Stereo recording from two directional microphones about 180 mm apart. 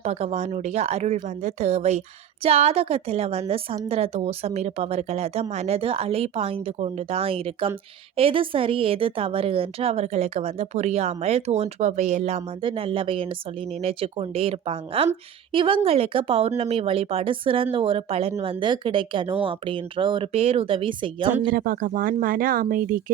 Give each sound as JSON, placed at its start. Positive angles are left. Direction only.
{"t": 0.0, "sound": "a woman's voice", "side_deg": -40}
{"t": 21.5, "sound": "speech", "side_deg": -50}